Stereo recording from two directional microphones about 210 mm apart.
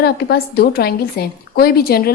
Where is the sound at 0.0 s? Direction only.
50° left (ahead or behind).